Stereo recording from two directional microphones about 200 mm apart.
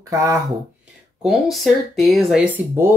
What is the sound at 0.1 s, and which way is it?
Speech, 15° right (ahead or behind).